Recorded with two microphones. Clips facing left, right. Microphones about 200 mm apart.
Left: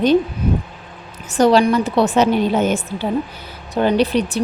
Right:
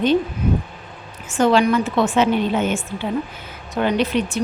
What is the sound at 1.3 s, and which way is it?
A woman's voice, 35° left (ahead or behind).